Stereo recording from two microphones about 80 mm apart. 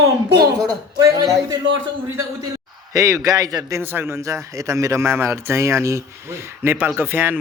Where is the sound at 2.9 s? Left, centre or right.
Right.